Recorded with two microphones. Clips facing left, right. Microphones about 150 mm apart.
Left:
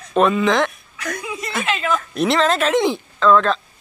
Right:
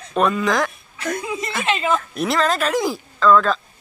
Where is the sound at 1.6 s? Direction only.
25° right (ahead or behind).